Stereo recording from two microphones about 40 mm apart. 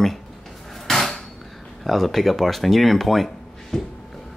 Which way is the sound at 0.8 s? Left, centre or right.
Centre.